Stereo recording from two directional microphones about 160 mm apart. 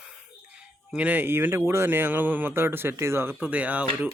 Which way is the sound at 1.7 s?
15° right (ahead or behind).